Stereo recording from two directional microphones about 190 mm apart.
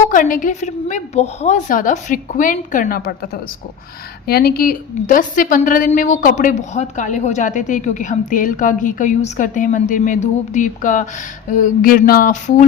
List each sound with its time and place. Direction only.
0.1 s a woman's voice: 45° left (ahead or behind)
4.3 s a woman's voice: 55° left (ahead or behind)